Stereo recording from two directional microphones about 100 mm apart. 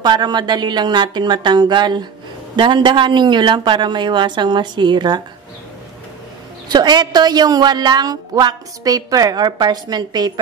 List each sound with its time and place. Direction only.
0.0 s a woman's voice: 45° right (ahead or behind)
6.7 s a woman's voice: 45° right (ahead or behind)